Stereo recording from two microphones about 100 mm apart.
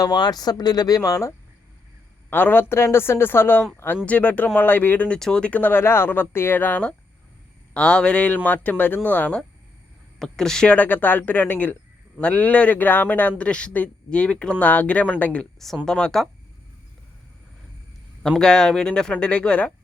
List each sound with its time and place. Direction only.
0.0 s speech: 45° left (ahead or behind)
2.3 s a woman's voice: 20° left (ahead or behind)
10.2 s a man's voice: 5° left (ahead or behind)
18.2 s a man's voice: 5° left (ahead or behind)